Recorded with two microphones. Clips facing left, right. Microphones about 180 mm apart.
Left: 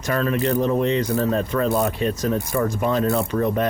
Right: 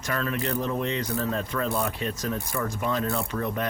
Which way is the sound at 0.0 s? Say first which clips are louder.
Left 7 dB; 25° left (ahead or behind).